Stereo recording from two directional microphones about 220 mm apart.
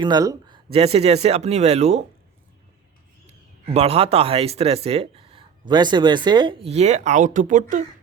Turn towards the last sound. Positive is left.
turn(degrees=-35)  # may be behind; listen again after turning